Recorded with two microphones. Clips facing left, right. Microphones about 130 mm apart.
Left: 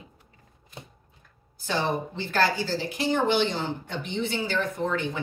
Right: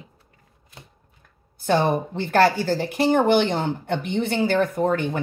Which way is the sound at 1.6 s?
50° right (ahead or behind).